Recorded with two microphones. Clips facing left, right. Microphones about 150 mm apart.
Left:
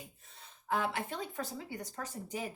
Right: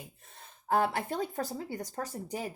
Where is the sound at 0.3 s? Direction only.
45° right (ahead or behind).